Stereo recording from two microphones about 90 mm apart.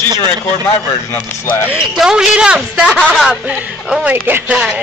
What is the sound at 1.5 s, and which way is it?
Speech, 30° left (ahead or behind).